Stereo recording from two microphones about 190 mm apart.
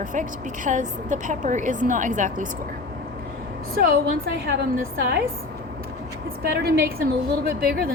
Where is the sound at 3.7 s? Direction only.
50° right (ahead or behind).